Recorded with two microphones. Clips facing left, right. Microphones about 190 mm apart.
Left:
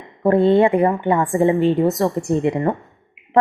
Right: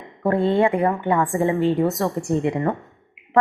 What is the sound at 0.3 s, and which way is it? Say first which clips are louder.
A woman's voice: left 5 dB; 20° left (ahead or behind).